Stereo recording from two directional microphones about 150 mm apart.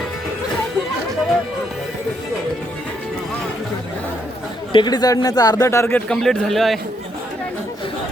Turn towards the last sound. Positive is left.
turn(degrees=0)  # may be behind; listen again after turning